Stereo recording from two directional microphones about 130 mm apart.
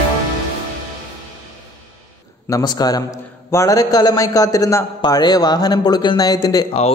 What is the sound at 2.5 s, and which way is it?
A man's voice, 30° left (ahead or behind).